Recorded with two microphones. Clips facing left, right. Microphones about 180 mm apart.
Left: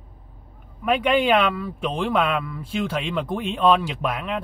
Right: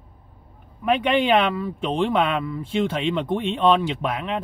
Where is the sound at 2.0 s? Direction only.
30° right (ahead or behind).